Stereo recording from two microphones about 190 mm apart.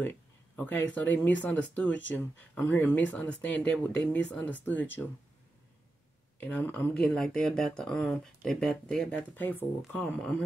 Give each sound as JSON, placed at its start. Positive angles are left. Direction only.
{"t": 0.6, "sound": "speech", "side_deg": 10}
{"t": 6.4, "sound": "speech", "side_deg": 10}